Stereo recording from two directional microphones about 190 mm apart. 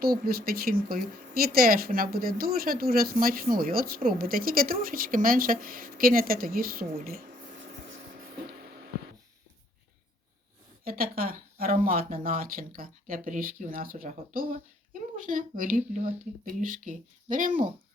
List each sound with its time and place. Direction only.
0.0 s a woman's voice: 50° right (ahead or behind)
10.8 s a woman's voice: 50° right (ahead or behind)